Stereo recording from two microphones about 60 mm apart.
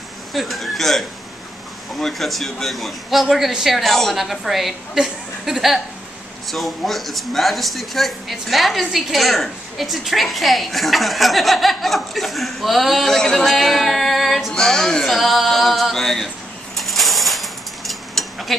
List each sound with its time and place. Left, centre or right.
0.3 s speech: centre
16.7 s mechanisms: centre